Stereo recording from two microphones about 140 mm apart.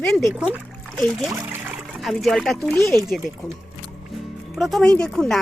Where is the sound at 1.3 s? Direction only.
20° right (ahead or behind).